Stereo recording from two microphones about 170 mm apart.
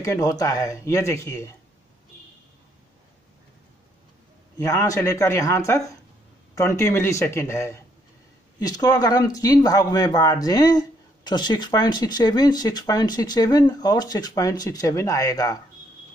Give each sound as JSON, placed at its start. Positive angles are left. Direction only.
{"t": 0.0, "sound": "speech", "side_deg": 20}
{"t": 4.6, "sound": "speech", "side_deg": 20}